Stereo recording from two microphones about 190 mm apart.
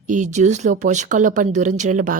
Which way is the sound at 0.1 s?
40° right (ahead or behind).